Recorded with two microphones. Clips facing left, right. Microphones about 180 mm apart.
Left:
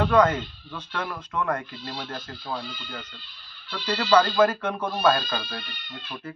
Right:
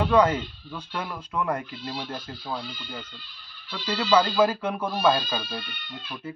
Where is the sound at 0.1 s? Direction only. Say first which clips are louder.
Even; 10° right (ahead or behind).